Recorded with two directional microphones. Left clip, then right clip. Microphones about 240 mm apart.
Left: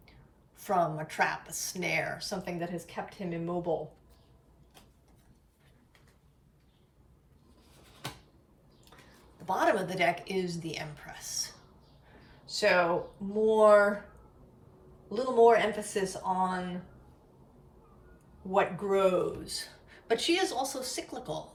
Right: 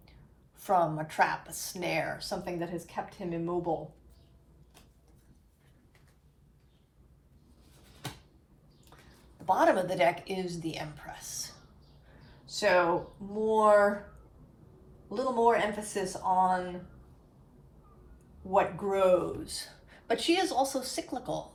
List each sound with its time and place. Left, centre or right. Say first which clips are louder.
0.6 s speech: right 2 dB; centre
9.5 s speech: right 3 dB; centre
12.5 s speech: even; centre
15.1 s speech: left 3 dB; centre
18.5 s speech: even; centre